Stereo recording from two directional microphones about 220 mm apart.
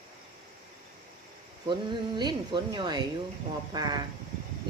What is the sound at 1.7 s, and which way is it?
Speech, 20° right (ahead or behind).